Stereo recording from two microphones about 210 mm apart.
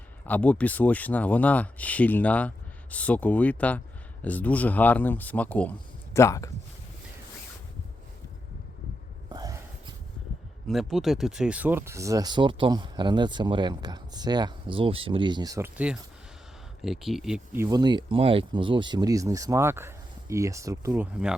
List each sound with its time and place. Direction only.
0.3 s speech: 5° left (ahead or behind)
9.3 s a sound: 15° right (ahead or behind)
10.7 s speech: centre (ahead or behind)